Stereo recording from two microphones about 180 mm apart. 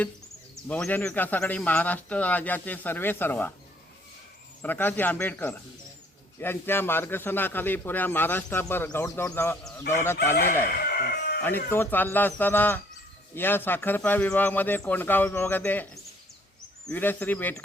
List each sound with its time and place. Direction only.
0.5 s a man's voice: 5° left (ahead or behind)
4.6 s a man's voice: 10° left (ahead or behind)
10.3 s fowl: 50° left (ahead or behind)
11.4 s a man's voice: 10° left (ahead or behind)